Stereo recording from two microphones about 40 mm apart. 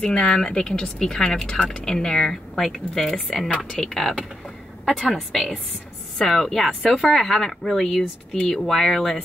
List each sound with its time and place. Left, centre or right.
0.0 s speech: centre
5.1 s speech: centre